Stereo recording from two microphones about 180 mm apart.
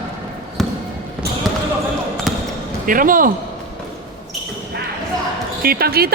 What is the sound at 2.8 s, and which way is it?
Speech, 50° right (ahead or behind).